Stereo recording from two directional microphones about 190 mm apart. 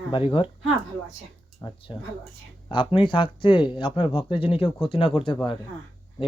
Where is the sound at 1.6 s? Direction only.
25° left (ahead or behind).